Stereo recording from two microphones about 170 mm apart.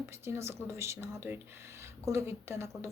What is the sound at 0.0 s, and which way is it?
Speech, 15° right (ahead or behind).